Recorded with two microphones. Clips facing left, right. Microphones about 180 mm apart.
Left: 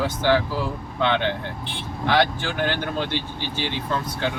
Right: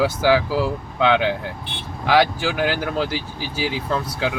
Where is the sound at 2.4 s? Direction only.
90° right.